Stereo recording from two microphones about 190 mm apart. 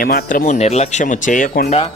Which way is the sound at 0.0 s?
45° left (ahead or behind).